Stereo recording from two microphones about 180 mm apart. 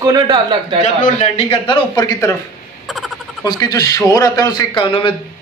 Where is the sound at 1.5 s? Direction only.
25° left (ahead or behind).